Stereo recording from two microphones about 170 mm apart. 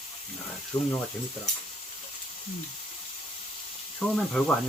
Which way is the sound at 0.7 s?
20° left (ahead or behind).